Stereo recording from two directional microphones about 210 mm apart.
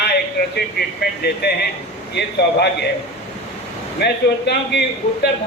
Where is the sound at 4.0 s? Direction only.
50° left (ahead or behind).